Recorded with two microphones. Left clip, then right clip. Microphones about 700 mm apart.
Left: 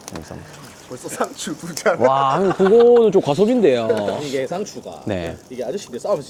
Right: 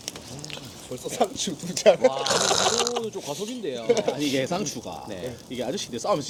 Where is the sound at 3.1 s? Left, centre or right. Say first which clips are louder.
Left 17 dB; left.